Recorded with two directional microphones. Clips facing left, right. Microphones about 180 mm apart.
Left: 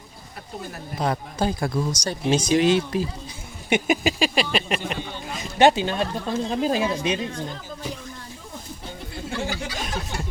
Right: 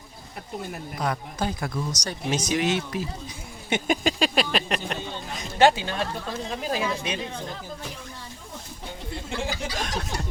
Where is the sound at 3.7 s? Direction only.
5° left (ahead or behind).